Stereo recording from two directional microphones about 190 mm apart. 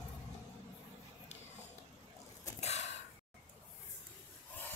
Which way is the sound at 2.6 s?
35° left (ahead or behind).